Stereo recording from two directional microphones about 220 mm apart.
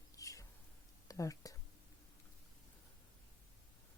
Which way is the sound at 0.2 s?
15° left (ahead or behind).